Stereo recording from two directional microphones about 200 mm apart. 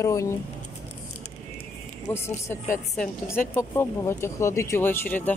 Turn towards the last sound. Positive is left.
turn(degrees=10)  # may be behind; listen again after turning